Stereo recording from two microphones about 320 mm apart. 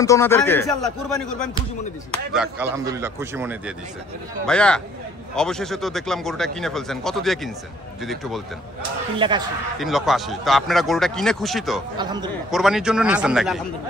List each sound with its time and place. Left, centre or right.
0.0 s a man's voice: centre
9.1 s a man's voice: centre
9.8 s speech: centre
12.0 s a man's voice: centre
12.4 s speech: centre